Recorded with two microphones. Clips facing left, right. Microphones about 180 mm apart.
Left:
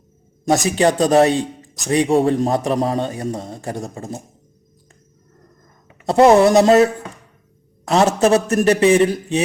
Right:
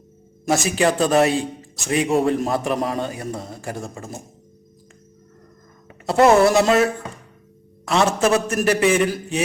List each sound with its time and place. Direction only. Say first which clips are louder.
0.4 s speech: left 3 dB; 35° left (ahead or behind)
6.1 s speech: left 3 dB; 35° left (ahead or behind)